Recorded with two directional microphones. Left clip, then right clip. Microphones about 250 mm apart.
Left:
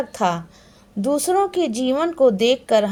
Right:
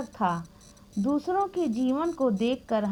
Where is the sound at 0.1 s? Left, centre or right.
Right.